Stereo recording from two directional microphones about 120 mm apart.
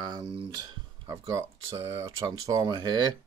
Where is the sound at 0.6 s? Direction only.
40° right (ahead or behind).